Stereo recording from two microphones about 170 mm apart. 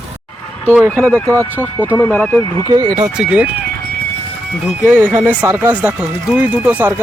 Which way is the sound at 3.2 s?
5° right (ahead or behind).